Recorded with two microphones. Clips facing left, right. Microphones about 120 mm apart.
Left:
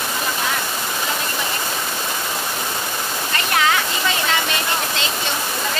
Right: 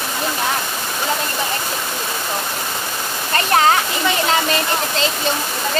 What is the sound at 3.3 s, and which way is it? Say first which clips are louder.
Waterfall: right 5 dB; 40° right (ahead or behind).